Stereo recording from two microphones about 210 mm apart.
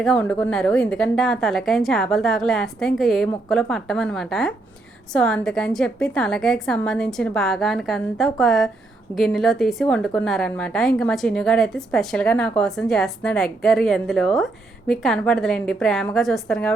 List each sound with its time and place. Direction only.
0.0 s a woman's voice: 5° left (ahead or behind)